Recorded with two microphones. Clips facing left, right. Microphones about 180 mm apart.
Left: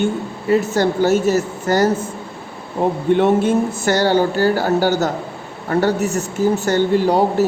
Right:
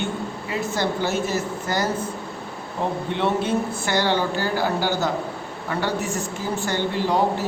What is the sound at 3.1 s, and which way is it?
Speech, 50° left (ahead or behind).